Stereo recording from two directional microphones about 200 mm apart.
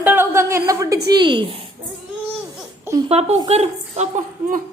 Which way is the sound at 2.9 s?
10° right (ahead or behind).